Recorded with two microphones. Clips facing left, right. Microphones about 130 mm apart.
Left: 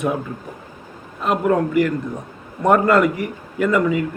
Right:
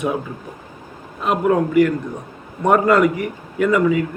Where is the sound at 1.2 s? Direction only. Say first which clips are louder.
Right 1 dB; centre (ahead or behind).